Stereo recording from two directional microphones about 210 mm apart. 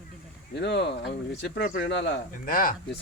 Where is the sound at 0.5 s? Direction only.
55° left (ahead or behind).